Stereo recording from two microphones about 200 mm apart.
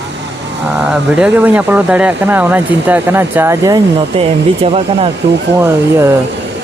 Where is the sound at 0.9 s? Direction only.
5° right (ahead or behind).